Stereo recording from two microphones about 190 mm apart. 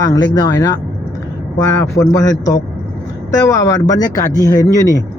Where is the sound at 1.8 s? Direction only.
20° left (ahead or behind).